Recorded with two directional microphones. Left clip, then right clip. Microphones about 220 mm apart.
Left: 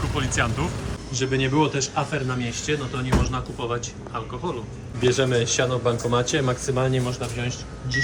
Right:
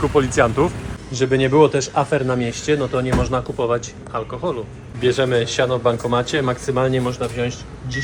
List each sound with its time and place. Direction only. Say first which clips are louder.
0.0 s a man's voice: right 9 dB; 5° left (ahead or behind)